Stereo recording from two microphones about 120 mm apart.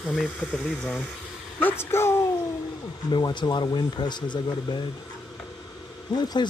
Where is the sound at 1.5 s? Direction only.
15° left (ahead or behind).